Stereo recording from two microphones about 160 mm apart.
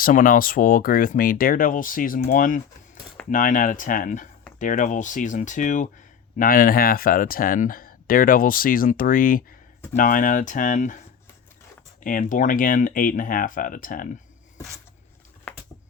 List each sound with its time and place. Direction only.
0.0 s speech: 60° left (ahead or behind)
12.0 s speech: 55° left (ahead or behind)